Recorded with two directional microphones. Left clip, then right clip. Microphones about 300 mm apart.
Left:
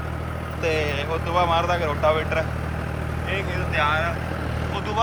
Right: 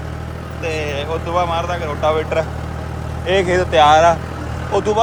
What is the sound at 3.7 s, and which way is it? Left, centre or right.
Speech, centre.